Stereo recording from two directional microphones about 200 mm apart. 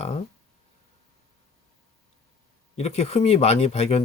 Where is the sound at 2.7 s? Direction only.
30° left (ahead or behind).